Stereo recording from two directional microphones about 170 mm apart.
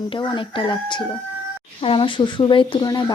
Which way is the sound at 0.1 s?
30° left (ahead or behind).